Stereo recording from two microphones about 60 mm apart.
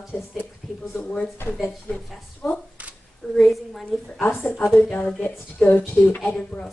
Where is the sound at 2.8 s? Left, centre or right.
Right.